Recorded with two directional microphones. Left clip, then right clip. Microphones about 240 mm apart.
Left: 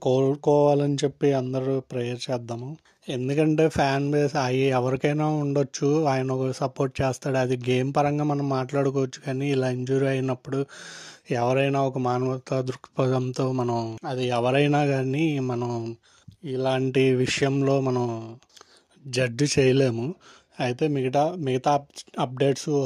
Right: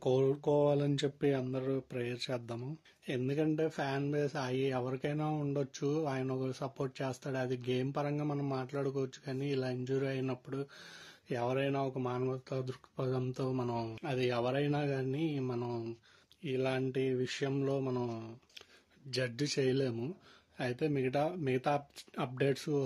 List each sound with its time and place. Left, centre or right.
0.0 s speech: left